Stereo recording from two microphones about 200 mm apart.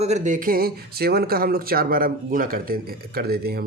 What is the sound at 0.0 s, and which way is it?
Speech, 35° right (ahead or behind).